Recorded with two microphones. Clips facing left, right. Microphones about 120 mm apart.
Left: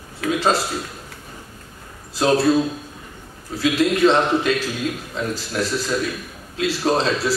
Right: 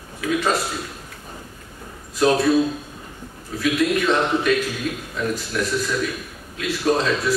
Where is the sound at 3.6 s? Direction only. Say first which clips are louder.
Left 3 dB; 30° left (ahead or behind).